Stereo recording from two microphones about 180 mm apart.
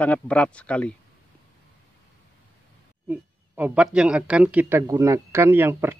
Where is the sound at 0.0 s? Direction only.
5° left (ahead or behind).